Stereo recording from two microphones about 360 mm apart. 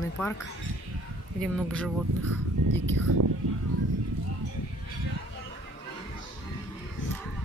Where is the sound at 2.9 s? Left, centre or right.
Right.